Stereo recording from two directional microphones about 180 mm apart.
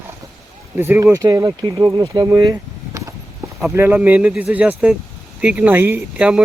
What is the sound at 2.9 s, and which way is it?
Mechanisms, 15° right (ahead or behind).